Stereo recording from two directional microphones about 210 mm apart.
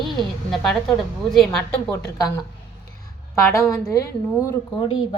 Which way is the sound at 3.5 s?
15° left (ahead or behind).